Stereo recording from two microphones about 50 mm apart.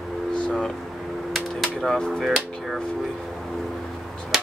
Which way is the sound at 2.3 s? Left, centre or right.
Centre.